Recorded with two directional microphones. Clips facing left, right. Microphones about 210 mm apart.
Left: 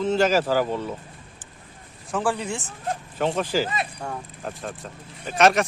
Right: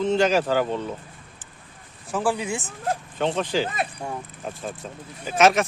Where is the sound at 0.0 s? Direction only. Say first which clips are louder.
Even; centre (ahead or behind).